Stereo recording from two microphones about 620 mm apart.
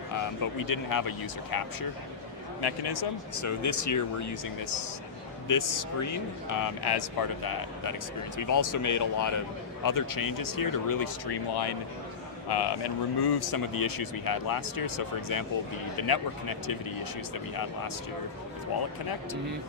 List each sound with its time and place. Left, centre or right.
0.1 s a man's voice: left